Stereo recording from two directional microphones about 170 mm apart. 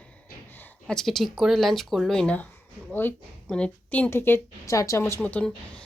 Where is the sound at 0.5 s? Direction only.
5° left (ahead or behind).